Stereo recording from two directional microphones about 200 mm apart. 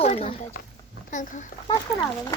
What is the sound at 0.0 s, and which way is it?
Speech, 30° left (ahead or behind).